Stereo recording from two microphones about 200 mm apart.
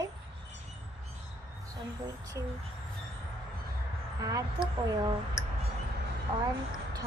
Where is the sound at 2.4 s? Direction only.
15° right (ahead or behind).